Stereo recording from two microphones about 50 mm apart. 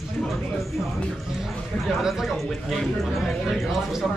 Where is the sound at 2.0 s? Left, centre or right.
Centre.